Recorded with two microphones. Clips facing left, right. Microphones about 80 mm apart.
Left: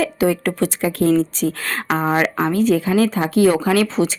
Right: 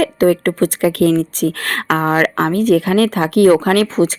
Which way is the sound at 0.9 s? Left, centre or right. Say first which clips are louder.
Right 2 dB; right.